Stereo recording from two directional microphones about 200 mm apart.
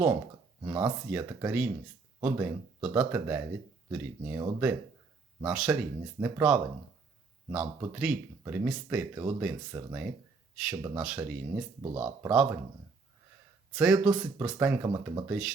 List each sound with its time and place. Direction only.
0.6 s speech: 15° right (ahead or behind)
11.8 s speech: 20° right (ahead or behind)
12.3 s speech: 5° right (ahead or behind)
13.7 s speech: 5° right (ahead or behind)